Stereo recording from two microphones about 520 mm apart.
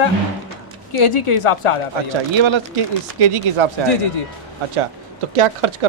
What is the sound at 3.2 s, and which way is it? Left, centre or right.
Speech, right.